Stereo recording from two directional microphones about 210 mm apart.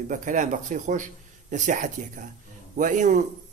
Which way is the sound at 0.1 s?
35° right (ahead or behind).